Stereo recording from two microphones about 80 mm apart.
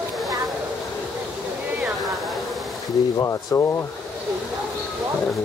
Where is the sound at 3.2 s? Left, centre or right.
Left.